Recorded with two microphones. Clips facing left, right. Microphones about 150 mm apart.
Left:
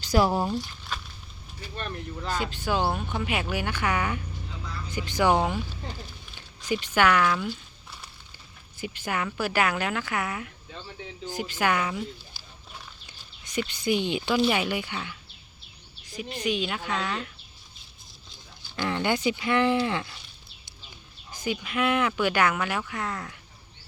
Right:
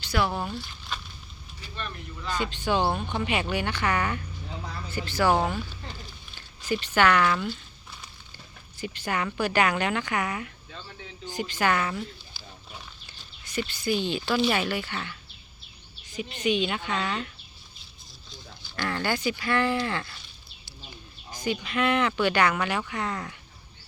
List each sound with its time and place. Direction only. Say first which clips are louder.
0.0 s speech: left 4 dB; 40° left (ahead or behind)
1.7 s speech: left 3 dB; 40° left (ahead or behind)
2.6 s speech: right 2 dB; 5° left (ahead or behind)
6.7 s speech: even; 10° left (ahead or behind)
13.1 s speech: even; 20° left (ahead or behind)
16.4 s speech: right 3 dB; centre (ahead or behind)
18.8 s speech: left 2 dB; 15° left (ahead or behind)
21.4 s speech: right 1 dB; 5° left (ahead or behind)